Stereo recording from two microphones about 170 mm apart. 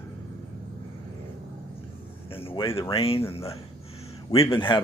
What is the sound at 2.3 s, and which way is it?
A man's voice, 35° left (ahead or behind).